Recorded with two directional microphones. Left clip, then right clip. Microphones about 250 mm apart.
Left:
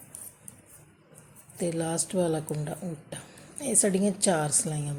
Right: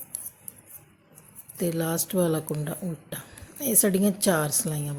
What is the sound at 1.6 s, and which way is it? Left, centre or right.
Speech, centre.